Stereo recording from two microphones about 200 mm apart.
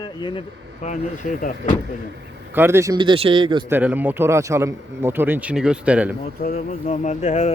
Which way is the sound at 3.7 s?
10° right (ahead or behind).